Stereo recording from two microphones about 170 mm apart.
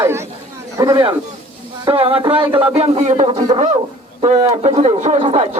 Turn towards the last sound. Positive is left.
turn(degrees=-35)  # may be behind; listen again after turning